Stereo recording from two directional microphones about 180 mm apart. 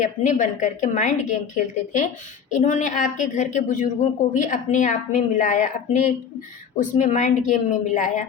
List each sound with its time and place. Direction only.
0.0 s a woman's voice: 45° left (ahead or behind)